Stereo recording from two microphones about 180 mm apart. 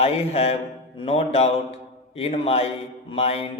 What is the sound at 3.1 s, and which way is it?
Mantra, 35° left (ahead or behind).